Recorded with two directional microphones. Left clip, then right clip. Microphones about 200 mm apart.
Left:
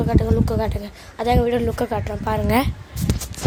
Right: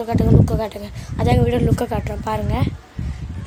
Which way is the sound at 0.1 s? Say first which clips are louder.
Right 6 dB; 5° right (ahead or behind).